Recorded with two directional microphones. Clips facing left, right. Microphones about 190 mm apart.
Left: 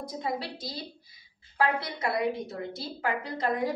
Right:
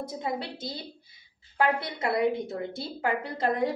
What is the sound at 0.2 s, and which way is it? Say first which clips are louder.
A woman's voice: left 1 dB; 25° right (ahead or behind).